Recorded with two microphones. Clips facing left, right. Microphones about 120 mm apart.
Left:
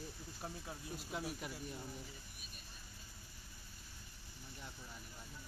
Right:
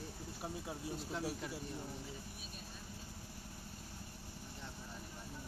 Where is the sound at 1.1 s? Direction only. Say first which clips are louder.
Right 1 dB; 10° left (ahead or behind).